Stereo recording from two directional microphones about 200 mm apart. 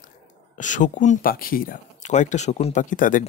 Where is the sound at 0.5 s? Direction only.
40° left (ahead or behind).